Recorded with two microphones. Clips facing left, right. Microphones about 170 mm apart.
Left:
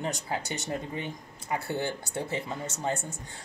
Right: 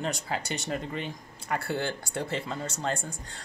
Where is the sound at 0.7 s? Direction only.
75° right (ahead or behind).